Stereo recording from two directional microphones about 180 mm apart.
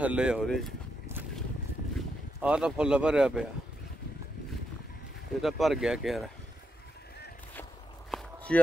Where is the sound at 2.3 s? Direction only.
5° right (ahead or behind).